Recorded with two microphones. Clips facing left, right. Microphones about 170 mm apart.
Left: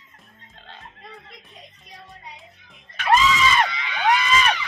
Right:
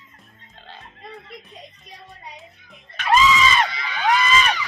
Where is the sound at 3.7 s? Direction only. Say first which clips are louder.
Right 1 dB; 40° right (ahead or behind).